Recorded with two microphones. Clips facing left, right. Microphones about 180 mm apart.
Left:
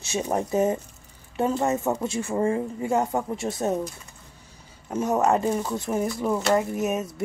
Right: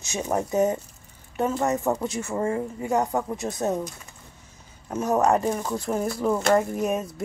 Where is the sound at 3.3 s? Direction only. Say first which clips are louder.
Left 1 dB; 25° left (ahead or behind).